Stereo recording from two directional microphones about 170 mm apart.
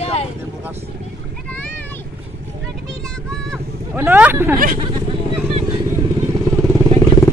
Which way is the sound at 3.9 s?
10° right (ahead or behind).